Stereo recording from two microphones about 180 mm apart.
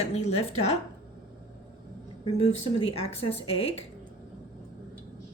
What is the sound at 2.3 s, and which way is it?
Speech, 35° left (ahead or behind).